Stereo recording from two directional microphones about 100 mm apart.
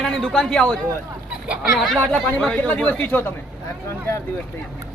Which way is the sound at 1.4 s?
10° right (ahead or behind).